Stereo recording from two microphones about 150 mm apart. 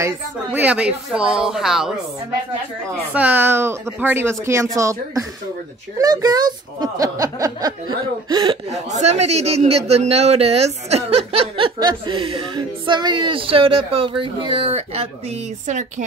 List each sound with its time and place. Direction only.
0.0 s speech: 10° right (ahead or behind)
3.2 s speech: 10° right (ahead or behind); by 8.5 s 30° right (ahead or behind)
8.7 s a man's voice: 50° right (ahead or behind)